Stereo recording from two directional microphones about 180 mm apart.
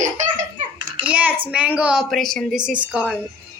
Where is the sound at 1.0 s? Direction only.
10° right (ahead or behind).